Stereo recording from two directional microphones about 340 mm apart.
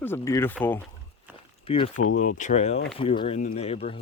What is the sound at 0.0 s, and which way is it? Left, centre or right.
Speech, centre.